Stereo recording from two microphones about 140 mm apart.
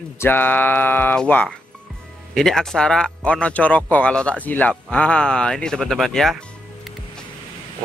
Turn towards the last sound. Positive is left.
turn(degrees=0)  # may be behind; listen again after turning